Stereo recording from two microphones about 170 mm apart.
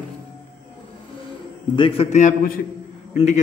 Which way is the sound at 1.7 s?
30° left (ahead or behind).